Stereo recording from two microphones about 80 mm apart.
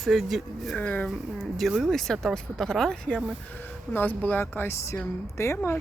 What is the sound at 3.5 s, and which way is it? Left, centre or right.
Speech, left.